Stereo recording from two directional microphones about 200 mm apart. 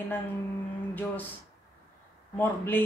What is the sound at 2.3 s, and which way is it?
Speech, 10° left (ahead or behind).